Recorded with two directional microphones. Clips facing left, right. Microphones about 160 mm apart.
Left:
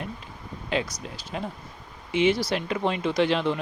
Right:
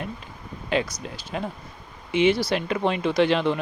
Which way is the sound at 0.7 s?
60° right (ahead or behind).